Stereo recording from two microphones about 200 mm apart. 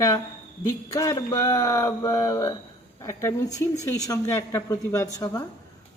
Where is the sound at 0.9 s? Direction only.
15° left (ahead or behind).